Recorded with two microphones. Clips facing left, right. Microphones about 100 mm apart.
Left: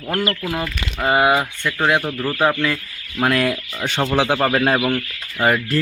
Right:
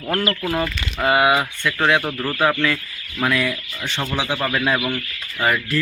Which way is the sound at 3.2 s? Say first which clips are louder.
Left 3 dB; 45° left (ahead or behind).